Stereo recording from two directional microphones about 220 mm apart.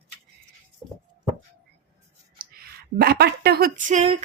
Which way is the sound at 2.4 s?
45° right (ahead or behind).